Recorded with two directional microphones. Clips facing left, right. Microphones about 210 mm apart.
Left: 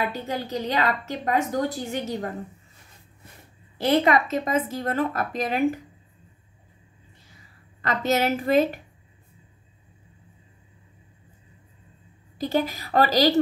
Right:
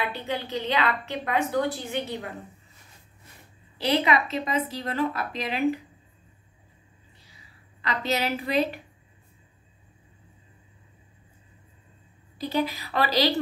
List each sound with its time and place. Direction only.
0.0 s a woman's voice: 40° left (ahead or behind)
3.7 s a woman's voice: 45° left (ahead or behind)
7.8 s a woman's voice: 45° left (ahead or behind)
12.4 s a woman's voice: 45° left (ahead or behind)